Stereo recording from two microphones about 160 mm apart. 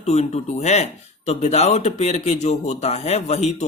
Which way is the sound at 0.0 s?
45° left (ahead or behind).